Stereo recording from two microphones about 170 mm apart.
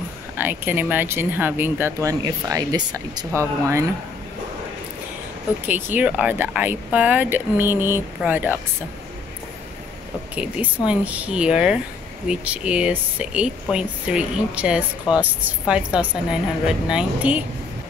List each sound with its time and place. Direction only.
0.4 s speech: 10° right (ahead or behind)
5.9 s speech: 10° right (ahead or behind)
10.3 s speech: 10° right (ahead or behind)